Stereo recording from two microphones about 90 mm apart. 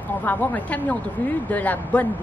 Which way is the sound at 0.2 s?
20° left (ahead or behind).